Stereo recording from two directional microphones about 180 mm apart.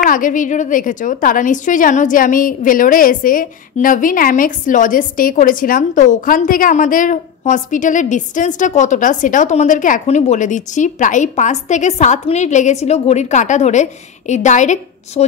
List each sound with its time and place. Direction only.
0.0 s a woman's voice: 50° left (ahead or behind)